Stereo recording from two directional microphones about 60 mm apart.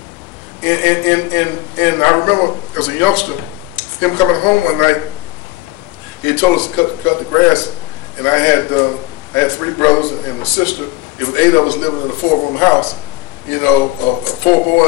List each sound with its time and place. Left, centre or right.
0.6 s a man's voice: left
2.7 s speech: left
6.2 s a man's voice: left